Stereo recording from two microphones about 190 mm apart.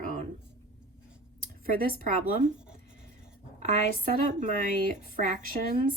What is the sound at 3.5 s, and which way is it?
Speech, 40° right (ahead or behind).